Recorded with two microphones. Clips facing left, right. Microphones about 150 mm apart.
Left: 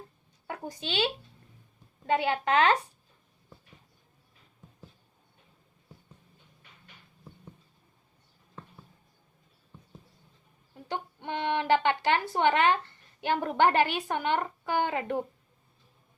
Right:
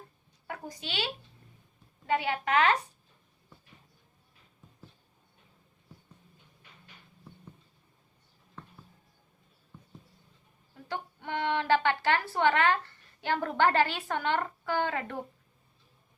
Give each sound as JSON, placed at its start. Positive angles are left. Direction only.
{"t": 0.4, "sound": "a woman's voice", "side_deg": 25}
{"t": 10.8, "sound": "speech", "side_deg": 20}